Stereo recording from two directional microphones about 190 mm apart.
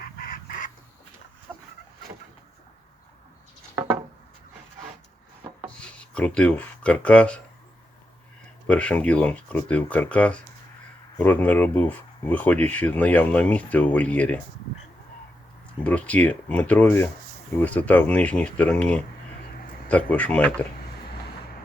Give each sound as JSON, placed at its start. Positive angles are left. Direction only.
{"t": 0.2, "sound": "goose", "side_deg": 45}
{"t": 1.5, "sound": "a sound", "side_deg": -10}
{"t": 5.8, "sound": "speech", "side_deg": 5}
{"t": 8.6, "sound": "speech", "side_deg": 5}
{"t": 15.8, "sound": "speech", "side_deg": 5}